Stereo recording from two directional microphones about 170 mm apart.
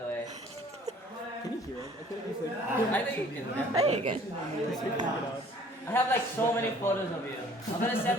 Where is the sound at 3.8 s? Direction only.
40° right (ahead or behind).